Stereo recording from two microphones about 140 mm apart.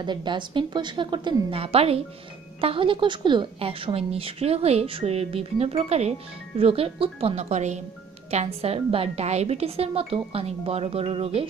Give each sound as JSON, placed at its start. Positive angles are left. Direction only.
{"t": 0.0, "sound": "a woman's voice", "side_deg": -35}